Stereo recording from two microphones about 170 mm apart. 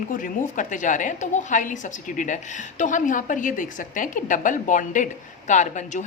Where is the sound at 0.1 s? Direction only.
50° left (ahead or behind).